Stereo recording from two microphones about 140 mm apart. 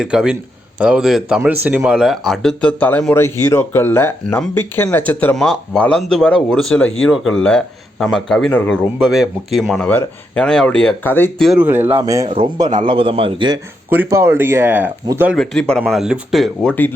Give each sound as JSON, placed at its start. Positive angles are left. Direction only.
{"t": 0.0, "sound": "speech", "side_deg": -5}
{"t": 11.5, "sound": "a man's voice", "side_deg": -15}
{"t": 13.9, "sound": "speech", "side_deg": -15}
{"t": 15.4, "sound": "speech", "side_deg": 5}